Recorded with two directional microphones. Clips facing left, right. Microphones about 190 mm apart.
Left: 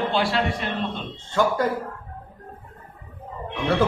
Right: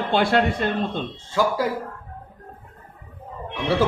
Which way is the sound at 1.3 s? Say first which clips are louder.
Even; 5° right (ahead or behind).